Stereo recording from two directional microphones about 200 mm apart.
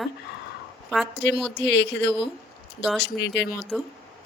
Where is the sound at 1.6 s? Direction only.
60° left (ahead or behind).